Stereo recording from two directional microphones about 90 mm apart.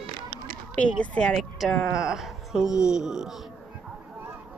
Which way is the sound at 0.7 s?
15° left (ahead or behind).